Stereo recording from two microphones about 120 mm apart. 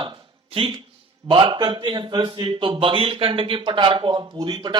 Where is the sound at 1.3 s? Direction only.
40° right (ahead or behind).